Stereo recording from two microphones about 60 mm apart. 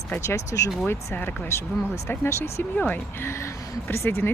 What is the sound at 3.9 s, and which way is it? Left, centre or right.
Speech, left.